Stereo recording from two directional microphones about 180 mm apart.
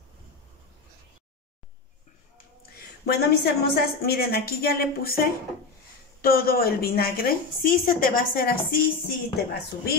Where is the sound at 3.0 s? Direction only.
60° left (ahead or behind).